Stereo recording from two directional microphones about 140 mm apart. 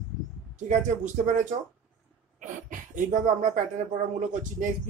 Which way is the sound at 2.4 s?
65° right (ahead or behind).